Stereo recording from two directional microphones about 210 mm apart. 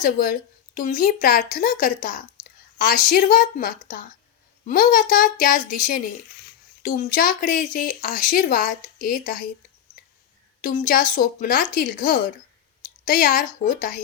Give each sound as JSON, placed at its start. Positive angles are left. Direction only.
{"t": 0.0, "sound": "a woman's voice", "side_deg": 40}
{"t": 10.6, "sound": "a woman's voice", "side_deg": 40}